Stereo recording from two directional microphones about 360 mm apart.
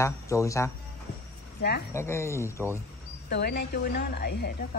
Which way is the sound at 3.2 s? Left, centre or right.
Left.